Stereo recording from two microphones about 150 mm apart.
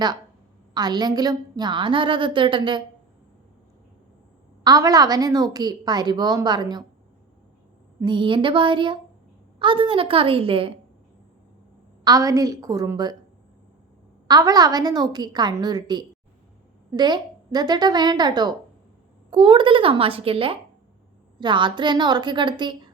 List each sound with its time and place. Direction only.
0.7 s a woman's voice: 25° right (ahead or behind)
4.6 s a woman's voice: 25° right (ahead or behind)
8.0 s a woman's voice: 35° right (ahead or behind)
12.0 s a woman's voice: 25° right (ahead or behind)
14.3 s a woman's voice: 25° right (ahead or behind)